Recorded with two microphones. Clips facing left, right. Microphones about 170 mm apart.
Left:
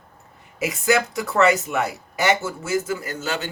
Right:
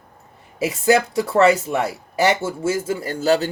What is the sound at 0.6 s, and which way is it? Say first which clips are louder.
Speech: right 4 dB; 30° right (ahead or behind).